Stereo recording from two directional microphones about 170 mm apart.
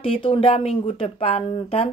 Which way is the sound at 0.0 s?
30° left (ahead or behind).